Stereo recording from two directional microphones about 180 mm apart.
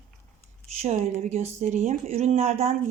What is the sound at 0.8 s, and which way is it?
Speech, 35° right (ahead or behind).